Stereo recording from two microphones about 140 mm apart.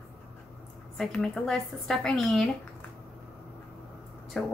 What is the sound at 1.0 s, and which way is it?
A woman's voice, 5° left (ahead or behind).